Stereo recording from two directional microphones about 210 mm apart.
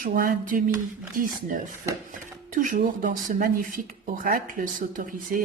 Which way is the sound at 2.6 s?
40° right (ahead or behind).